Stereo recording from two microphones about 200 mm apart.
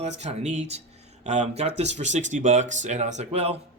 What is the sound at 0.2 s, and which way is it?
Speech, 35° right (ahead or behind).